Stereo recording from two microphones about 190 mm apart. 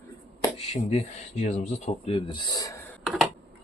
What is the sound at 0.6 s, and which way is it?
Speech, 35° left (ahead or behind).